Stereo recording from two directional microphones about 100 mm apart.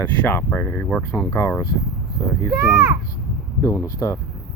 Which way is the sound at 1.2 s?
30° left (ahead or behind).